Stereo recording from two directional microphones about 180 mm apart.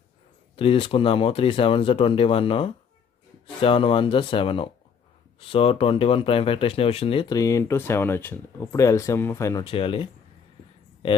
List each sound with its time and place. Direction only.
0.6 s speech: 30° left (ahead or behind)